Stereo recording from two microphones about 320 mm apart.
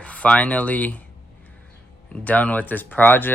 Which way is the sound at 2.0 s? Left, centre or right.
Centre.